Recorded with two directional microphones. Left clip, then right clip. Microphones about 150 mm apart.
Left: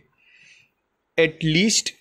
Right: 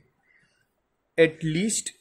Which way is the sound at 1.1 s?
20° left (ahead or behind).